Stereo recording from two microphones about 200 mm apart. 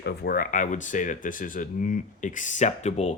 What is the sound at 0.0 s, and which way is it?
A man's voice, 55° left (ahead or behind).